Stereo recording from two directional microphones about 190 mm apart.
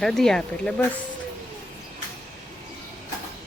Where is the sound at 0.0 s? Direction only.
Centre (ahead or behind).